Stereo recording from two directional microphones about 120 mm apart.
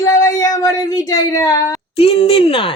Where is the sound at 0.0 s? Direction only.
30° left (ahead or behind).